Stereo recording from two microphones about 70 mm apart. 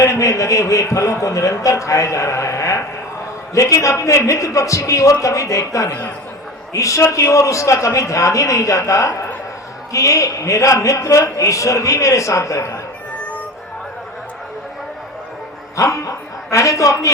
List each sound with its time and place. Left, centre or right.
0.0 s a man's voice: left
15.7 s a man's voice: left